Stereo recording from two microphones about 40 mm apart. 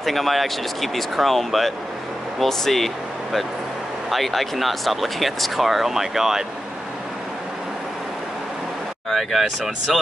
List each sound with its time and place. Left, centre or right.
0.0 s speech: centre
4.1 s speech: centre
9.1 s speech: centre